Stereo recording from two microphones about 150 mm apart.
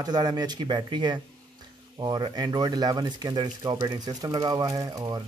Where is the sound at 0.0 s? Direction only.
25° right (ahead or behind).